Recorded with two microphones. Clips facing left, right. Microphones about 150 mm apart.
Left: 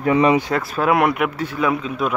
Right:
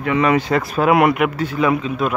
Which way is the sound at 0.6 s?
15° right (ahead or behind).